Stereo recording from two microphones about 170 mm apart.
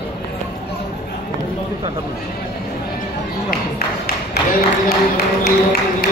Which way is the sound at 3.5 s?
65° left (ahead or behind).